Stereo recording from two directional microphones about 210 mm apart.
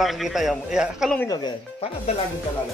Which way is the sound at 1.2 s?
20° left (ahead or behind).